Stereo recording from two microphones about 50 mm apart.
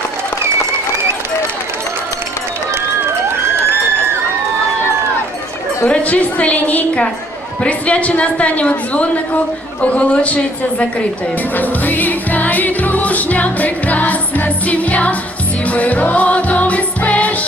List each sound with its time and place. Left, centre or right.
5.9 s a woman's voice: left
11.5 s music: left